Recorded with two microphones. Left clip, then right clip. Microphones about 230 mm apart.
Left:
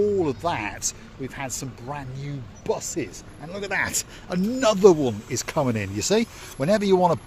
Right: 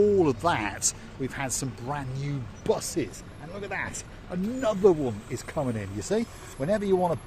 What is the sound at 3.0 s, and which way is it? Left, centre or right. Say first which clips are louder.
Speech: left 1 dB; centre.